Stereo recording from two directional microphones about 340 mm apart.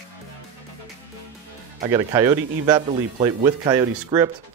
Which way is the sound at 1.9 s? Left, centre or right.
Centre.